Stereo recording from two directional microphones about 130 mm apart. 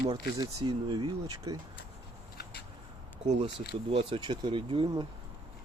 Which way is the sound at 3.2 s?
55° right (ahead or behind).